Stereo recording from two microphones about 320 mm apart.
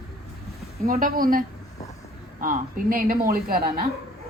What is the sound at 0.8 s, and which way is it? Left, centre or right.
Speech, right.